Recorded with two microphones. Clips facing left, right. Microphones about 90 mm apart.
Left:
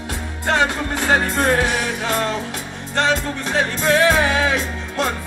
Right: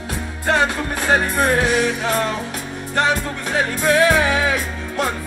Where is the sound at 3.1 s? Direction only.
25° left (ahead or behind).